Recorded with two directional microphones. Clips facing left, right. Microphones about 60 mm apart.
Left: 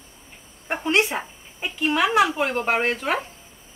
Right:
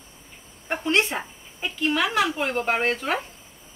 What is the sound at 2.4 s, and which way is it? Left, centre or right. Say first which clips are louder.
Speech: left 2 dB; centre.